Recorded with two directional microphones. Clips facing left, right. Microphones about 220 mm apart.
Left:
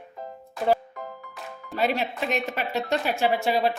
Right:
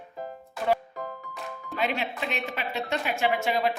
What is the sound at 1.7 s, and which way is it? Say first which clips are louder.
Speech: left 4 dB; 40° left (ahead or behind).